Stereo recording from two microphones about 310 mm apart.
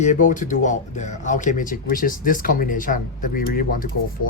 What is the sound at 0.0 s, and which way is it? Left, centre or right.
Speech, left.